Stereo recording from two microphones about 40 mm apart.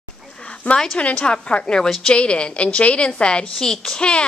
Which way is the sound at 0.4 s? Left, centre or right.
Left.